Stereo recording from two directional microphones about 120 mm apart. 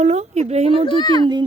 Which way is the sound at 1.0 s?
35° left (ahead or behind).